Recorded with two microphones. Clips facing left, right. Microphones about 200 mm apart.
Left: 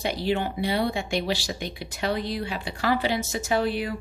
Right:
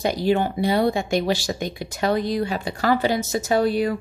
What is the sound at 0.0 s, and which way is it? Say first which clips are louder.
Speech: right 5 dB; 45° right (ahead or behind).